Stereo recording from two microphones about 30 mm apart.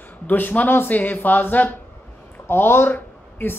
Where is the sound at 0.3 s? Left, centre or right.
Left.